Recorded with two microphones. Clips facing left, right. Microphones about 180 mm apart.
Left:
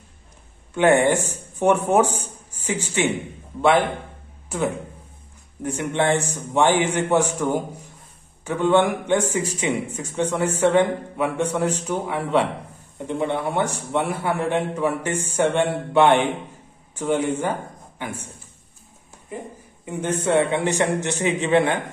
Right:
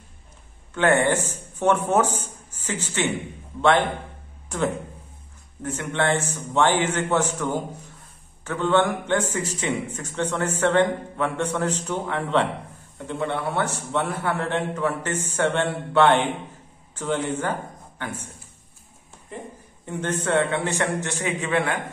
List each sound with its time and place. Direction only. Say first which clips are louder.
0.7 s speech: left 3 dB; 15° left (ahead or behind)
4.5 s a man's voice: left 1 dB; 10° left (ahead or behind)
19.8 s a man's voice: left 2 dB; 10° left (ahead or behind)